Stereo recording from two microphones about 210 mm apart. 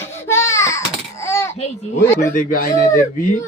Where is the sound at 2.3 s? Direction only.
40° left (ahead or behind).